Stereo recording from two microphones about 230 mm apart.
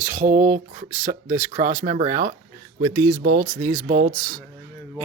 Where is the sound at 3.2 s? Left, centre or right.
Right.